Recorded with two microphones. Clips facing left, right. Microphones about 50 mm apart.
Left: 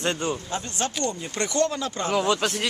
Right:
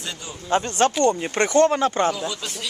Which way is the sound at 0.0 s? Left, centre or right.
Left.